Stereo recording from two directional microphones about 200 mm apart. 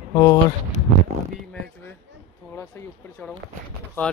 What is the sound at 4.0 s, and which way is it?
Speech, 10° left (ahead or behind).